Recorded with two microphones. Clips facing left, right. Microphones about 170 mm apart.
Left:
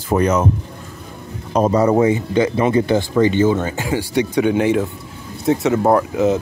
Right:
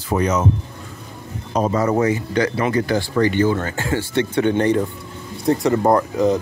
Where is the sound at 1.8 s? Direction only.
20° left (ahead or behind).